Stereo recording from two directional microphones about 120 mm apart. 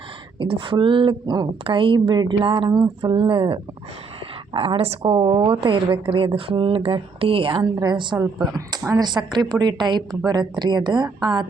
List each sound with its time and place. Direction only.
0.3 s a woman's voice: 45° right (ahead or behind)
2.6 s a sound: 30° right (ahead or behind)
3.0 s a woman's voice: 45° right (ahead or behind)
7.6 s a woman's voice: 35° right (ahead or behind)